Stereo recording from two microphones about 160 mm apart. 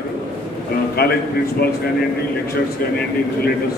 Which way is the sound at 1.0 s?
75° left (ahead or behind).